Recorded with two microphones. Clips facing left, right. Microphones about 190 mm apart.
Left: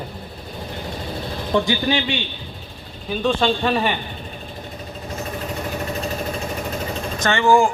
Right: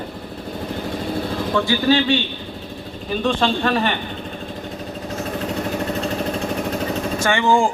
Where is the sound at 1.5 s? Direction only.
15° left (ahead or behind).